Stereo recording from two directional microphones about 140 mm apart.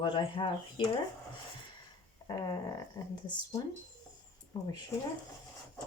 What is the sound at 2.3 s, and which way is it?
Speech, 30° left (ahead or behind).